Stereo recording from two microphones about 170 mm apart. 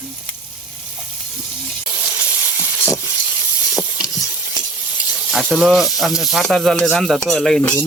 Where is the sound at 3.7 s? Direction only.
Centre (ahead or behind).